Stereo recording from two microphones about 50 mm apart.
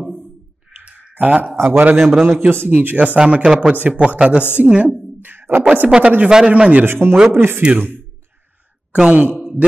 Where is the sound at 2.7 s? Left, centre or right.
Right.